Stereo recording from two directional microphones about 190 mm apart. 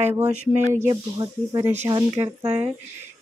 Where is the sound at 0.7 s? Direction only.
20° right (ahead or behind).